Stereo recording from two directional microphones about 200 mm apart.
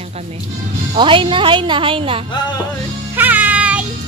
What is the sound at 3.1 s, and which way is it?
Music, 10° right (ahead or behind).